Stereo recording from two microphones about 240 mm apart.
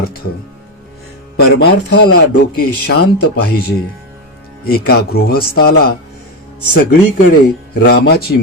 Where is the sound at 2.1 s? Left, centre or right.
Left.